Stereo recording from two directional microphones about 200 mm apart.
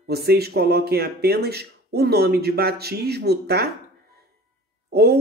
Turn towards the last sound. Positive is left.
turn(degrees=-55)  # may be behind; listen again after turning